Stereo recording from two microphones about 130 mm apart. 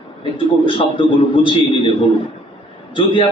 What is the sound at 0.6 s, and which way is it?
A man's voice, 40° left (ahead or behind).